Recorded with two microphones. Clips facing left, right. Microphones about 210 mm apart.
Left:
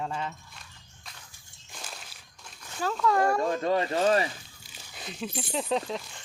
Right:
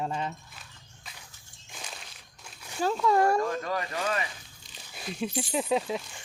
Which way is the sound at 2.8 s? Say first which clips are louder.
Right 2 dB; 20° right (ahead or behind).